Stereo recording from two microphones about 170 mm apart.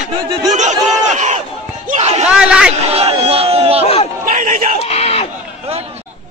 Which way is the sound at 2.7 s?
35° right (ahead or behind).